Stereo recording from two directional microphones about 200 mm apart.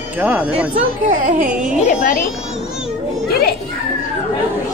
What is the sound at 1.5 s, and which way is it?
Speech, 5° right (ahead or behind).